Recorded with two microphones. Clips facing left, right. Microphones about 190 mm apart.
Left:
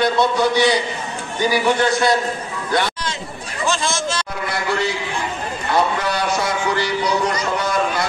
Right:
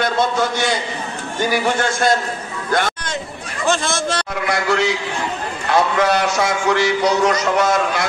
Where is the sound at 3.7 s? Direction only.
55° right (ahead or behind); by 4.9 s 70° right (ahead or behind).